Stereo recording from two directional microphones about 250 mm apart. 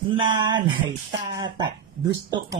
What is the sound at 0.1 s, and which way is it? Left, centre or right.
Speech, centre.